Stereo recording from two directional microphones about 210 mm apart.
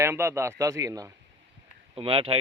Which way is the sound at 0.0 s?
10° right (ahead or behind).